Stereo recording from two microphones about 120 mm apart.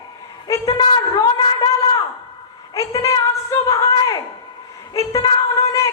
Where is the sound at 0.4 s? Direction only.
30° left (ahead or behind).